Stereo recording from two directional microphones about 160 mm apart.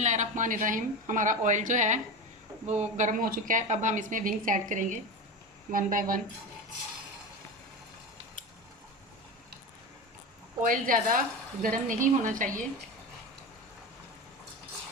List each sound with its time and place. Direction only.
0.0 s a woman's voice: 50° right (ahead or behind)
10.6 s a woman's voice: 55° right (ahead or behind)